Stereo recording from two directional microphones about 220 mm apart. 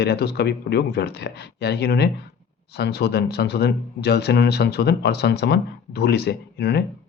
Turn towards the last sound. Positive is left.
turn(degrees=50)  # may be behind; listen again after turning